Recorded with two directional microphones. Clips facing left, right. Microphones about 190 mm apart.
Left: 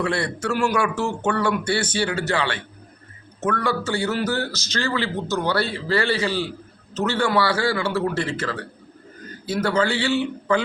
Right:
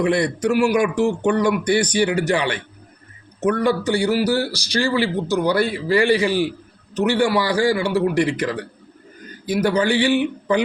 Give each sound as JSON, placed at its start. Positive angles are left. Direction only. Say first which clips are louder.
{"t": 0.0, "sound": "a man's voice", "louder": "right 6 dB", "side_deg": -15}